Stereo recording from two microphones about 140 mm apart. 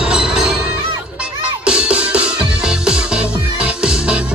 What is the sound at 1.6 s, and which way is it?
Music, 5° right (ahead or behind).